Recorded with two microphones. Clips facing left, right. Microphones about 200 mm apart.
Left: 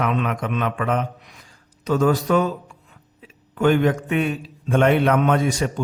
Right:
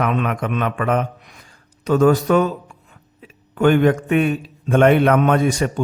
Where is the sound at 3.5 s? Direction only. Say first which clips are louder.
Right 3 dB; 55° right (ahead or behind).